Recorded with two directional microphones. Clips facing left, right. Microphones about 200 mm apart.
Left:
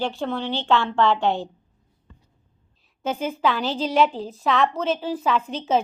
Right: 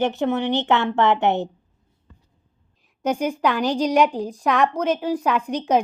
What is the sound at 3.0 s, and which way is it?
A woman's voice, 15° right (ahead or behind).